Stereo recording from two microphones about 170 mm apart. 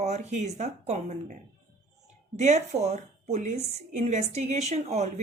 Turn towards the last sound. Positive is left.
turn(degrees=-40)  # may be behind; listen again after turning